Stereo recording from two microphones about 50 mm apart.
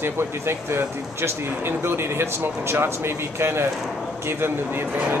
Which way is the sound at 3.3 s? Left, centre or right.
Right.